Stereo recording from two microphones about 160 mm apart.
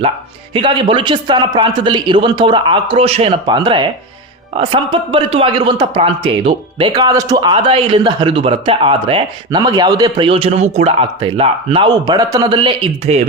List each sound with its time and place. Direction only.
0.5 s a man's voice: 30° right (ahead or behind)
10.2 s a man's voice: 35° right (ahead or behind)
12.5 s a man's voice: 40° right (ahead or behind)